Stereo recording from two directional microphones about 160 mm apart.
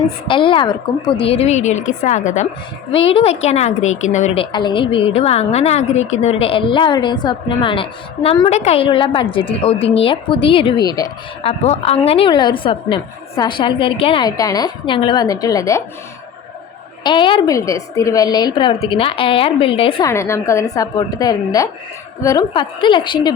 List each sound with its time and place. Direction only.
0.3 s a woman's voice: 30° left (ahead or behind); by 2.5 s 45° left (ahead or behind)
2.9 s a woman's voice: 35° left (ahead or behind)
4.4 s a woman's voice: 30° left (ahead or behind)
11.4 s a woman's voice: 40° left (ahead or behind); by 15.8 s 20° left (ahead or behind)
17.0 s a woman's voice: 30° left (ahead or behind)
17.5 s a woman's voice: 20° left (ahead or behind)
20.1 s a woman's voice: 15° left (ahead or behind)